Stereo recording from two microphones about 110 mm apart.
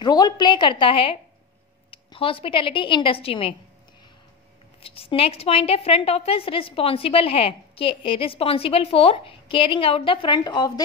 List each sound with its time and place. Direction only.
0.0 s a woman's voice: 40° left (ahead or behind); by 3.5 s 55° left (ahead or behind)
4.8 s a woman's voice: 60° left (ahead or behind)
10.3 s speech: 40° left (ahead or behind)